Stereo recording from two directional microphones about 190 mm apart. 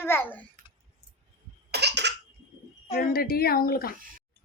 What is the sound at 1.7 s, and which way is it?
Cough, 60° right (ahead or behind).